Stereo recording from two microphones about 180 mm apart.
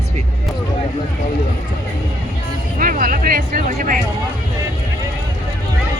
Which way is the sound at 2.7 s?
50° right (ahead or behind).